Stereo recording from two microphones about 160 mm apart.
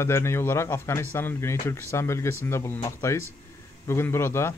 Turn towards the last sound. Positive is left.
turn(degrees=15)  # may be behind; listen again after turning